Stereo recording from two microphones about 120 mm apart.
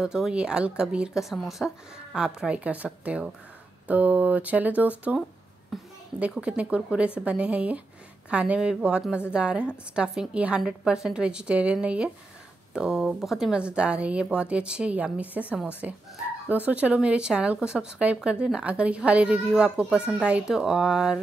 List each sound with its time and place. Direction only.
0.0 s a woman's voice: 5° right (ahead or behind)
5.7 s a child's voice: centre (ahead or behind)